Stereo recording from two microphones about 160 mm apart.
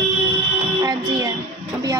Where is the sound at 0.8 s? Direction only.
25° right (ahead or behind).